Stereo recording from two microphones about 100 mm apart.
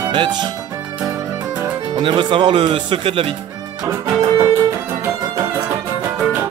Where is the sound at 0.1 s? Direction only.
50° right (ahead or behind).